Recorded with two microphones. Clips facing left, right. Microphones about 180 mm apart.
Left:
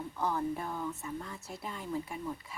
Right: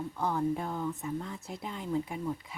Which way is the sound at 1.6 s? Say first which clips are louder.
Right 4 dB; 20° right (ahead or behind).